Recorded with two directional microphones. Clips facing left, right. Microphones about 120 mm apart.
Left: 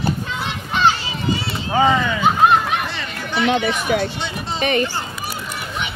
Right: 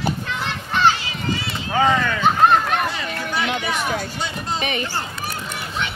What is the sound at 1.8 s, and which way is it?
Speech, 5° left (ahead or behind).